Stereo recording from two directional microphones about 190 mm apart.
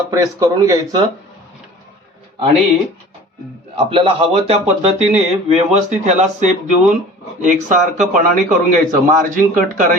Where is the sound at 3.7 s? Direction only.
25° right (ahead or behind).